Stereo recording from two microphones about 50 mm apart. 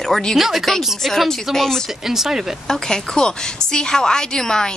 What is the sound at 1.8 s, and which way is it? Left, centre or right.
Speech, centre.